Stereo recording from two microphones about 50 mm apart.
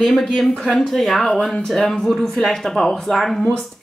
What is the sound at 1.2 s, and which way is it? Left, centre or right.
Speech, left.